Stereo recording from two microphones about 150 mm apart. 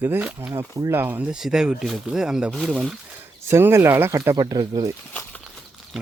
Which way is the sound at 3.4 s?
15° right (ahead or behind).